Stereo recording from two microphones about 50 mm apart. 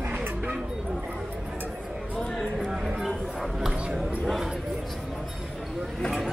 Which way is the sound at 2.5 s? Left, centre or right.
Centre.